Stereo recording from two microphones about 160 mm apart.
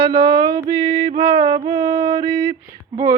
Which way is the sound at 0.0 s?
30° right (ahead or behind).